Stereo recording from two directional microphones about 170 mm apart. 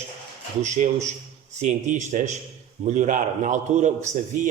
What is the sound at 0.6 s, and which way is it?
A man's voice, 45° right (ahead or behind).